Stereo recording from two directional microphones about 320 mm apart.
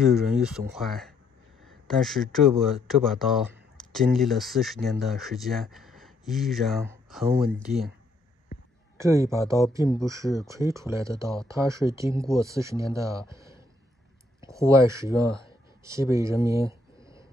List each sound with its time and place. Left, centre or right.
0.0 s speech: centre
8.9 s speech: centre
13.3 s a sound: centre
14.5 s speech: centre